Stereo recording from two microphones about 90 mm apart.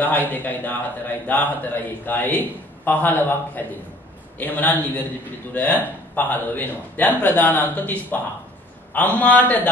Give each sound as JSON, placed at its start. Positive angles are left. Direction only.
{"t": 0.0, "sound": "a man's voice", "side_deg": 20}